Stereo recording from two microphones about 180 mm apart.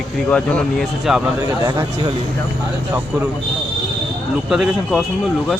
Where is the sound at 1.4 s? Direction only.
20° right (ahead or behind).